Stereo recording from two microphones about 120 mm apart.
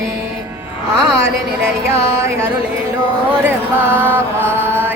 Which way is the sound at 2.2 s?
25° right (ahead or behind).